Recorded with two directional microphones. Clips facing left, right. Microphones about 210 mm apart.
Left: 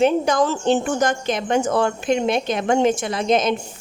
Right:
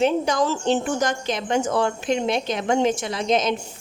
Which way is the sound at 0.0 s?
55° left (ahead or behind).